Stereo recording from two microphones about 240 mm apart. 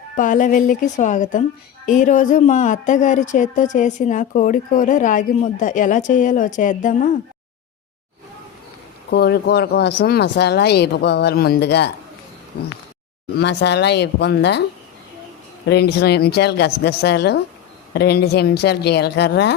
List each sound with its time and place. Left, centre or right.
0.2 s a woman's voice: left
9.0 s speech: left
15.6 s speech: left